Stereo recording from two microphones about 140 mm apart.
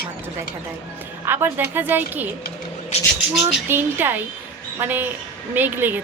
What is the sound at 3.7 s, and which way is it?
Speech, 15° right (ahead or behind).